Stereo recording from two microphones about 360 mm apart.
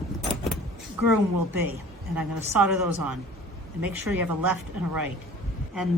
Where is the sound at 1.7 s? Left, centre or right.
Centre.